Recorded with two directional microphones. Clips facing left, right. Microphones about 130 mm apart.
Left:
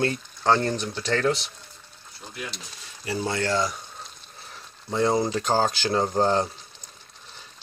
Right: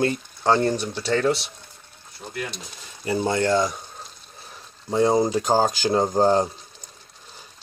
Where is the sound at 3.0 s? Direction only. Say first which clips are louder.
Right 5 dB; 25° right (ahead or behind).